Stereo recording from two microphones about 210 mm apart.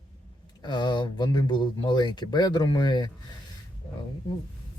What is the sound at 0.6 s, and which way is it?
Speech, 20° left (ahead or behind).